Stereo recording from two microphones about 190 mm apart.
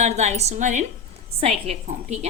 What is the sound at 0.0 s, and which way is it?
A woman's voice, 35° right (ahead or behind).